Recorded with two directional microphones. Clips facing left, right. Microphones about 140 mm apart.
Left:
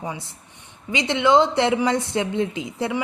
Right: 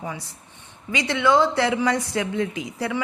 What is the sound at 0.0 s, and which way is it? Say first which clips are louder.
A woman's voice: left 1 dB; 20° left (ahead or behind).